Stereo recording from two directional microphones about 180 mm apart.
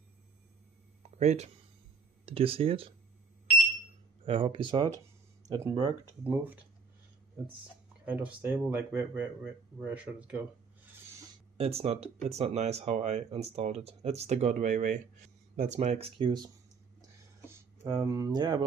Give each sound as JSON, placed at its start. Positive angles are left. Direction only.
{"t": 1.1, "sound": "speech", "side_deg": -40}
{"t": 4.2, "sound": "speech", "side_deg": -30}
{"t": 6.2, "sound": "speech", "side_deg": -10}
{"t": 8.0, "sound": "speech", "side_deg": -10}
{"t": 11.5, "sound": "speech", "side_deg": -35}
{"t": 17.9, "sound": "speech", "side_deg": -20}